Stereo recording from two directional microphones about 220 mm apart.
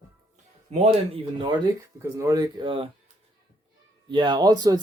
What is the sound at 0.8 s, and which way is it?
Speech, 25° right (ahead or behind).